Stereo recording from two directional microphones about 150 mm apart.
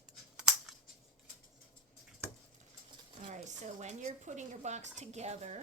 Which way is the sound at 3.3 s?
50° right (ahead or behind).